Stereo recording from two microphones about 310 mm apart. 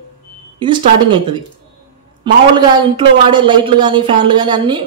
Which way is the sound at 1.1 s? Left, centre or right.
Centre.